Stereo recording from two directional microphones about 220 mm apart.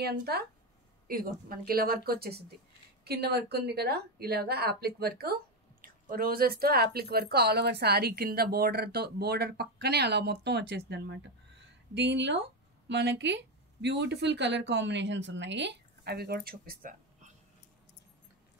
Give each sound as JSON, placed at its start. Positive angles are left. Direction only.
{"t": 0.0, "sound": "speech", "side_deg": -45}
{"t": 11.6, "sound": "a sound", "side_deg": -50}
{"t": 12.8, "sound": "speech", "side_deg": -50}